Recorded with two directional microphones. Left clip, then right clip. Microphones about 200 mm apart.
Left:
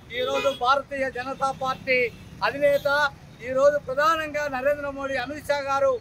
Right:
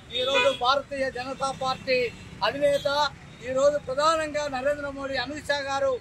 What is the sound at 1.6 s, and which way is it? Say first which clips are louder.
A man's voice: left 1 dB; 5° left (ahead or behind).